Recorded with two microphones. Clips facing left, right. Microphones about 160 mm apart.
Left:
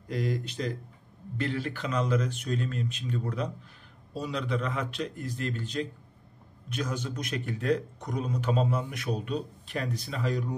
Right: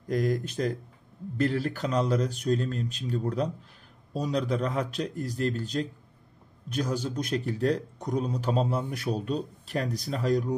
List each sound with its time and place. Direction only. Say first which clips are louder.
0.1 s a man's voice: right 4 dB; 45° right (ahead or behind)